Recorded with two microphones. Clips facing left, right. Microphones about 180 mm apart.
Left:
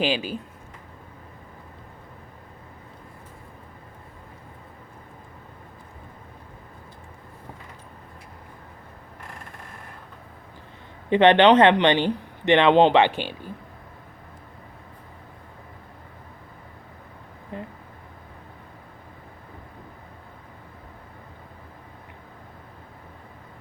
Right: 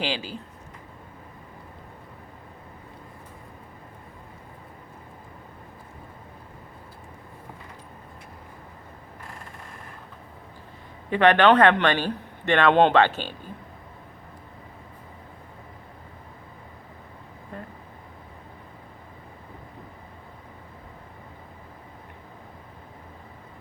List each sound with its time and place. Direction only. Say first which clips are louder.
0.0 s speech: left 5 dB; 20° left (ahead or behind)
11.1 s speech: left 3 dB; 25° left (ahead or behind)